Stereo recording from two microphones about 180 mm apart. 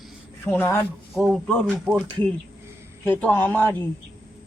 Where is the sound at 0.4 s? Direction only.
10° left (ahead or behind).